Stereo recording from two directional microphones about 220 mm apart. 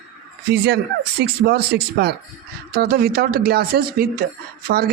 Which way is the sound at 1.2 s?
45° right (ahead or behind).